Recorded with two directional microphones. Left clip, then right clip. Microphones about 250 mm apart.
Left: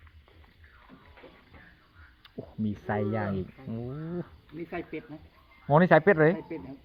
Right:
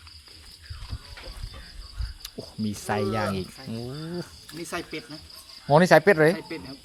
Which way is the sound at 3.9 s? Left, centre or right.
Right.